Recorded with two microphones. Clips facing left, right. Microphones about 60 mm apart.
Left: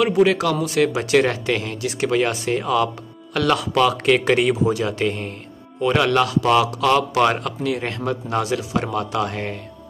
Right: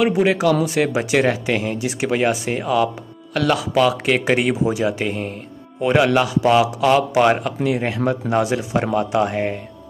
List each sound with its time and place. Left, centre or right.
0.0 s a man's voice: centre
5.8 s a man's voice: centre